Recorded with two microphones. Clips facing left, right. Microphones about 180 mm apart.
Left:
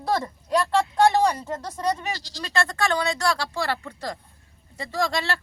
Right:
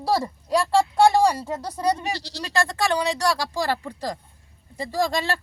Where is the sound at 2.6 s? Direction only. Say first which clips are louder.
Right 1 dB; 10° right (ahead or behind).